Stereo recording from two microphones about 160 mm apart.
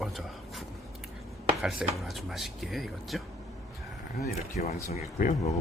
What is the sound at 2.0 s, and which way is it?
Speech, centre (ahead or behind).